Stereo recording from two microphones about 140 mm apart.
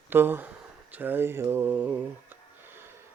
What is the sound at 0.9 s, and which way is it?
Speech, 15° right (ahead or behind).